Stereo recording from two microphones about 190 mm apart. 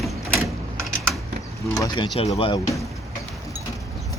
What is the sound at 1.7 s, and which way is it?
Speech, 20° left (ahead or behind).